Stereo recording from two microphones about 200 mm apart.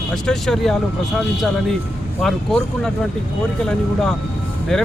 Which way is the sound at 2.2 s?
Centre (ahead or behind).